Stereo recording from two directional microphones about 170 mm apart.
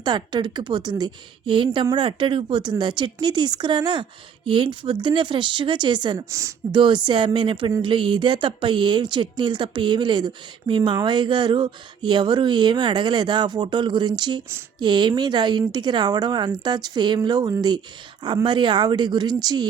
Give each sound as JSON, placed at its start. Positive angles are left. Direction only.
{"t": 0.0, "sound": "speech", "side_deg": -25}